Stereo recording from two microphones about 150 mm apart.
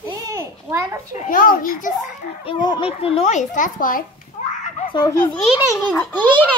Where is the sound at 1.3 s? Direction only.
65° left (ahead or behind).